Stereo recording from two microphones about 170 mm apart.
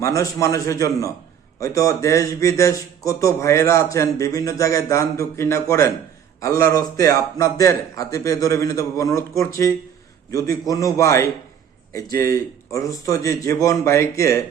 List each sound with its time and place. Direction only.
0.0 s speech: 20° left (ahead or behind)